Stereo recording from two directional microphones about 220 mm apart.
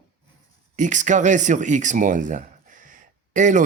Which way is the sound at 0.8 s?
35° right (ahead or behind).